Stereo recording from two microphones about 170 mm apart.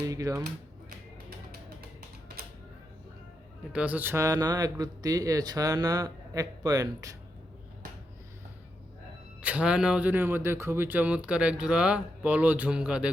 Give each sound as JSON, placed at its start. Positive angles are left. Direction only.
{"t": 0.1, "sound": "speech", "side_deg": -20}
{"t": 3.7, "sound": "speech", "side_deg": -10}
{"t": 9.4, "sound": "speech", "side_deg": -5}